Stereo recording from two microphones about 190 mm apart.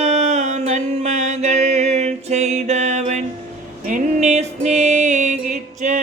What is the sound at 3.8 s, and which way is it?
Music, 40° right (ahead or behind).